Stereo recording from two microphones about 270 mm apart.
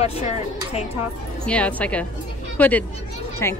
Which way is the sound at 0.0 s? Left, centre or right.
Left.